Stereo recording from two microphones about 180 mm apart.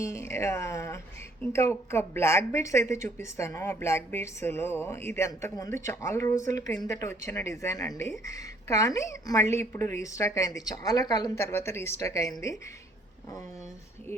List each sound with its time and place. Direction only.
0.0 s a woman's voice: 15° left (ahead or behind)